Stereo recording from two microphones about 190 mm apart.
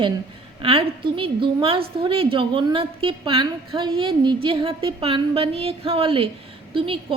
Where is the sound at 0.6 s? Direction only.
30° right (ahead or behind).